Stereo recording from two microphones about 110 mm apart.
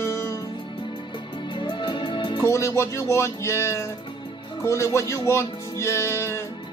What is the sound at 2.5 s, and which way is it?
Speech, 25° left (ahead or behind).